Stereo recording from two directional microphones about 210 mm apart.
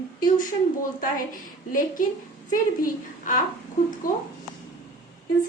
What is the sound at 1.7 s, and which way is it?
A woman's voice, 40° left (ahead or behind).